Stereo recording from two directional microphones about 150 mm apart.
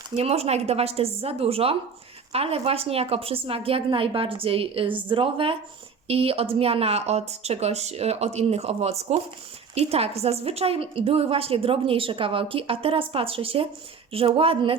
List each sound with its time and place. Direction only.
0.2 s a woman's voice: 45° right (ahead or behind)